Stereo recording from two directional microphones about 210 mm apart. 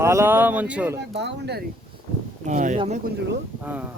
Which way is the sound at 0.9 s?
55° right (ahead or behind).